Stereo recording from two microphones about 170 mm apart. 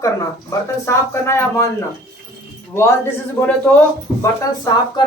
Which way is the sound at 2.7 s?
15° left (ahead or behind).